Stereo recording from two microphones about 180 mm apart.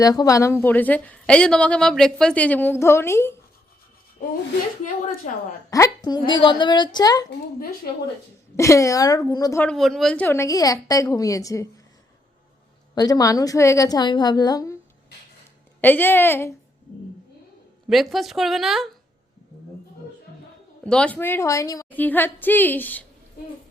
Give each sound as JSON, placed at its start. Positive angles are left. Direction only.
{"t": 0.0, "sound": "a woman's voice", "side_deg": 20}
{"t": 5.7, "sound": "a woman's voice", "side_deg": 20}
{"t": 7.3, "sound": "a woman's voice", "side_deg": 60}
{"t": 8.5, "sound": "a woman's voice", "side_deg": 15}
{"t": 9.6, "sound": "a woman's voice", "side_deg": 0}
{"t": 12.9, "sound": "a woman's voice", "side_deg": 20}
{"t": 15.8, "sound": "a woman's voice", "side_deg": 10}
{"t": 17.8, "sound": "speech", "side_deg": 0}
{"t": 20.8, "sound": "a woman's voice", "side_deg": 5}